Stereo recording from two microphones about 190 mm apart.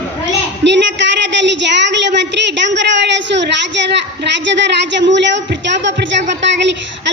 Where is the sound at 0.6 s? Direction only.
70° right (ahead or behind).